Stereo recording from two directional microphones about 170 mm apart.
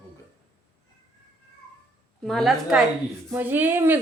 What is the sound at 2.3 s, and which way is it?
A woman's voice, centre (ahead or behind).